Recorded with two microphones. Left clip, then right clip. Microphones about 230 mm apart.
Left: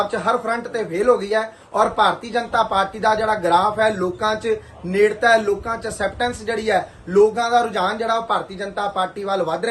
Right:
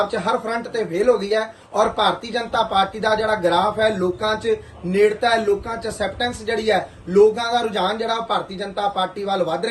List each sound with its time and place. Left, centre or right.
0.0 s speech: centre
4.3 s speech: left
5.4 s speech: centre